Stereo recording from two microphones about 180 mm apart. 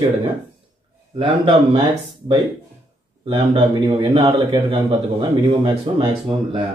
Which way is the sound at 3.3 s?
30° right (ahead or behind).